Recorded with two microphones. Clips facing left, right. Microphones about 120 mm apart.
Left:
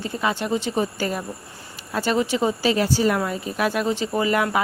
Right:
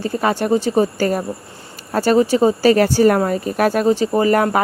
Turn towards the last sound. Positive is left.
turn(degrees=-45)  # may be behind; listen again after turning